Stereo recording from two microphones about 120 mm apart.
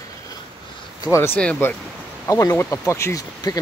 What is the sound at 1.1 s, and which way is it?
Speech, 20° left (ahead or behind).